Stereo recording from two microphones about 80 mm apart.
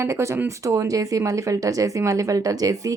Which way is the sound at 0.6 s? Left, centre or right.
Right.